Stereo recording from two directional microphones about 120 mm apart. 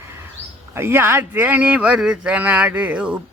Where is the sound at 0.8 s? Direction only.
20° right (ahead or behind).